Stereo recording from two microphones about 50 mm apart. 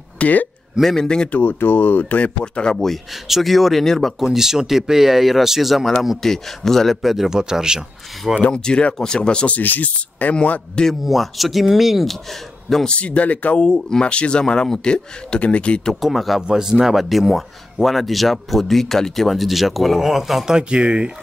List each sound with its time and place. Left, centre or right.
0.2 s speech: left
0.8 s speech: centre
1.3 s speech: left
2.4 s speech: centre
2.7 s speech: centre
4.2 s speech: centre
6.2 s speech: centre
8.5 s speech: centre
9.6 s speech: left
11.1 s speech: centre
12.6 s speech: centre
16.0 s speech: centre
16.4 s speech: centre
20.4 s speech: centre